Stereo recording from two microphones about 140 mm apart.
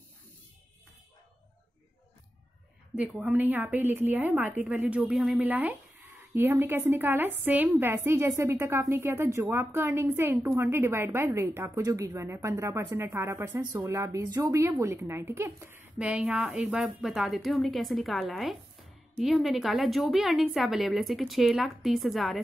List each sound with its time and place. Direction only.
3.0 s a woman's voice: 10° right (ahead or behind)